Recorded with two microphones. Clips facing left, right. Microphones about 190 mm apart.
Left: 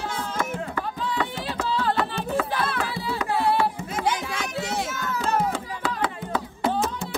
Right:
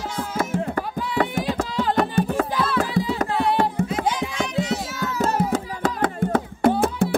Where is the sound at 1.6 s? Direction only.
15° right (ahead or behind).